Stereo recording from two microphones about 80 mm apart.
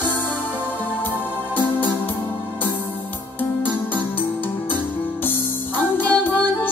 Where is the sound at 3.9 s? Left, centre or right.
Left.